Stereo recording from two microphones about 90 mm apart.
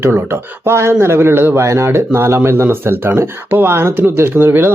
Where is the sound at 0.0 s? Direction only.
25° right (ahead or behind).